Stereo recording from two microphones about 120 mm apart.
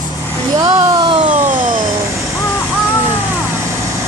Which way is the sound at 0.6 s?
40° right (ahead or behind).